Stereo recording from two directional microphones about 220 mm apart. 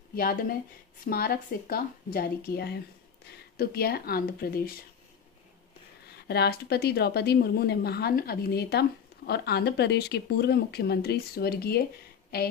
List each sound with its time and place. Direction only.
0.1 s a woman's voice: 40° left (ahead or behind)
6.2 s a woman's voice: 45° left (ahead or behind)